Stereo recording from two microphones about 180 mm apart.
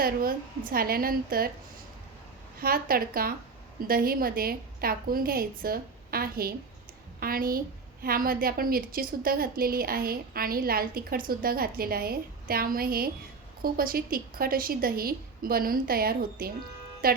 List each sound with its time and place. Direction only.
0.0 s a woman's voice: 55° right (ahead or behind)
2.6 s a woman's voice: 55° right (ahead or behind)